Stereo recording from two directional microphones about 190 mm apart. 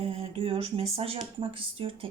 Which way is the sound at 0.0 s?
30° right (ahead or behind).